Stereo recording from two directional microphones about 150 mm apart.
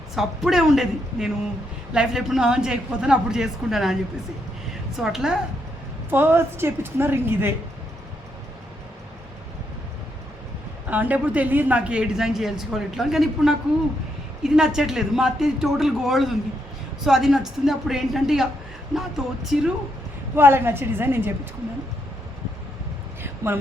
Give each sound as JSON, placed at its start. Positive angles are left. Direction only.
{"t": 0.2, "sound": "speech", "side_deg": 0}
{"t": 4.9, "sound": "speech", "side_deg": -5}
{"t": 6.1, "sound": "a woman's voice", "side_deg": -15}
{"t": 10.8, "sound": "speech", "side_deg": -10}
{"t": 20.3, "sound": "a woman's voice", "side_deg": -15}
{"t": 23.2, "sound": "a sound", "side_deg": -15}